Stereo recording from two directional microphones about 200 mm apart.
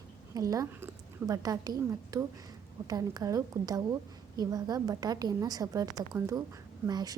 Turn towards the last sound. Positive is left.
turn(degrees=-20)  # may be behind; listen again after turning